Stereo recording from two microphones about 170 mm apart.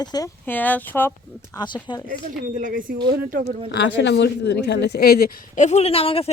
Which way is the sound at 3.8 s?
90° left.